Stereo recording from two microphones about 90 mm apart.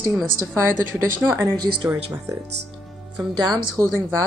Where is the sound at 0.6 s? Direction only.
30° right (ahead or behind).